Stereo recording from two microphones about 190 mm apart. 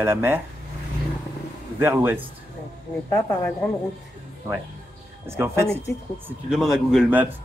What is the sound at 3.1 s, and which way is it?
Speech, 15° left (ahead or behind).